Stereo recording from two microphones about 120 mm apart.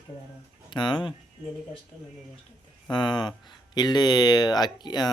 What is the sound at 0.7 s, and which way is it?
Speech, 40° left (ahead or behind).